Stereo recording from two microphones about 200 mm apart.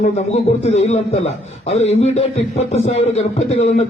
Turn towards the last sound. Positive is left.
turn(degrees=30)  # may be behind; listen again after turning